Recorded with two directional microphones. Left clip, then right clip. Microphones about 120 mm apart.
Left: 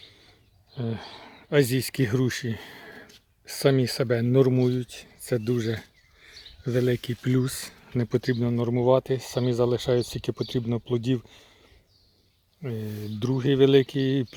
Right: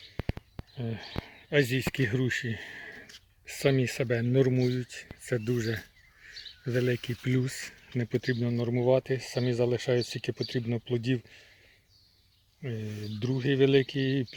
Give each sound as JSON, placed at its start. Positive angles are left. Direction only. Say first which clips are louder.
{"t": 0.8, "sound": "speech", "louder": "left 3 dB", "side_deg": 40}
{"t": 2.9, "sound": "speech", "louder": "left 1 dB", "side_deg": 25}
{"t": 12.6, "sound": "speech", "louder": "left 4 dB", "side_deg": 35}